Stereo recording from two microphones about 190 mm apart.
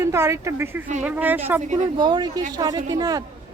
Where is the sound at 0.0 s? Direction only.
15° right (ahead or behind).